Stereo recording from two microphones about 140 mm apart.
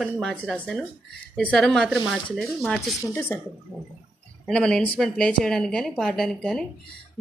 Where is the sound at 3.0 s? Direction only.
20° left (ahead or behind).